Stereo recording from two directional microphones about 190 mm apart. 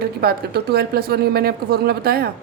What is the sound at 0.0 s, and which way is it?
Speech, 55° right (ahead or behind).